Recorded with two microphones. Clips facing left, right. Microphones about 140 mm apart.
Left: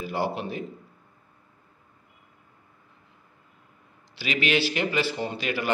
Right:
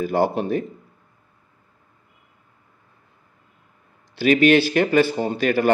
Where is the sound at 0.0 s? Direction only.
50° right (ahead or behind).